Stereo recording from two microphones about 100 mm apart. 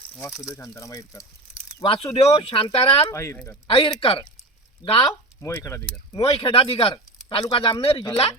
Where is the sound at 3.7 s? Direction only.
70° left (ahead or behind).